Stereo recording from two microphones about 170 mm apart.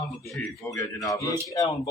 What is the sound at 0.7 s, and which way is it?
Speech, 20° left (ahead or behind).